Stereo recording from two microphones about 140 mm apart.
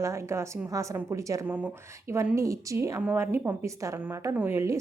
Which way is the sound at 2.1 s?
20° right (ahead or behind).